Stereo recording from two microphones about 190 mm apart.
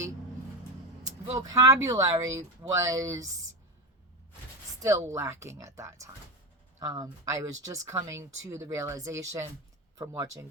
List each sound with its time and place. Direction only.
1.4 s a woman's voice: 15° right (ahead or behind)
4.8 s a woman's voice: 15° right (ahead or behind)